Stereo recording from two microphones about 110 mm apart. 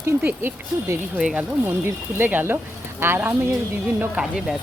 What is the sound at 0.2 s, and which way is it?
Speech, 15° right (ahead or behind).